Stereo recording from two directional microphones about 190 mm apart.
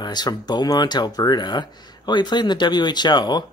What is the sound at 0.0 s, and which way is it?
Speech, 20° left (ahead or behind).